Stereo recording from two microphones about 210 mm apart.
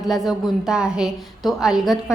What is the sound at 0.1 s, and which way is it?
A woman's voice, centre (ahead or behind).